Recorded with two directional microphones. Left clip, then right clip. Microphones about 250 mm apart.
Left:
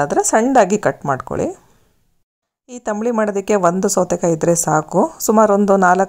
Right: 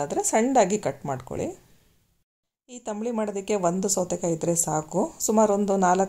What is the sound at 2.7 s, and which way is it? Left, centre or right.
Speech, left.